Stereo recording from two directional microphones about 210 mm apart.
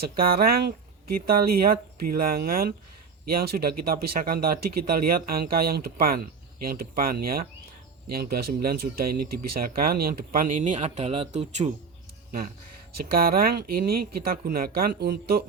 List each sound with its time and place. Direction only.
0.2 s speech: 45° right (ahead or behind)
13.0 s speech: 45° right (ahead or behind)